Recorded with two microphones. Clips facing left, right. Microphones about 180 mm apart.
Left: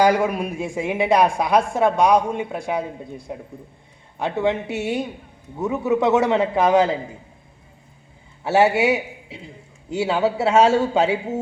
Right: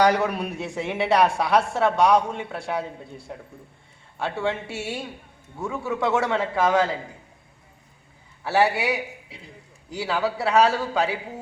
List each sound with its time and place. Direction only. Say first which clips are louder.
0.0 s a man's voice: left 3 dB; 10° left (ahead or behind)
8.4 s a man's voice: left 5 dB; 25° left (ahead or behind)